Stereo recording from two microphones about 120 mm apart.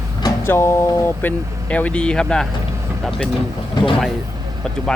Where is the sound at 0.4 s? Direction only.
20° left (ahead or behind).